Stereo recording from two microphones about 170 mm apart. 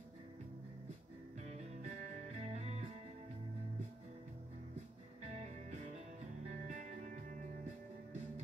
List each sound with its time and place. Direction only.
1.4 s music: 40° right (ahead or behind)
5.3 s music: 45° right (ahead or behind)